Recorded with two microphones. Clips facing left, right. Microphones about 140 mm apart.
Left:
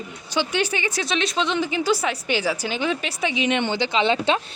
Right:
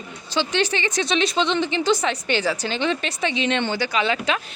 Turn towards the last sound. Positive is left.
turn(degrees=25)  # may be behind; listen again after turning